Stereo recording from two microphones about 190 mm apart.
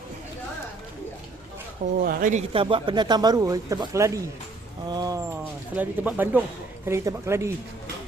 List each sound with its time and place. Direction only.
2.0 s speech: 45° right (ahead or behind)
2.5 s speech: 25° right (ahead or behind)
5.7 s speech: 10° right (ahead or behind)